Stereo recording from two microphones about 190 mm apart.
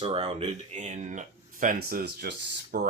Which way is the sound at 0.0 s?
30° right (ahead or behind).